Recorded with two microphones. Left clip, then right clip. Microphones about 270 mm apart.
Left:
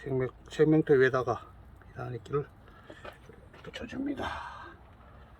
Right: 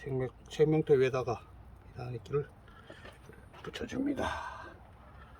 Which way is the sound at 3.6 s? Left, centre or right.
Right.